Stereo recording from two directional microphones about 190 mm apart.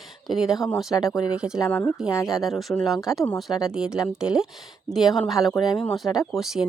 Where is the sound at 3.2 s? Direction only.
Centre (ahead or behind).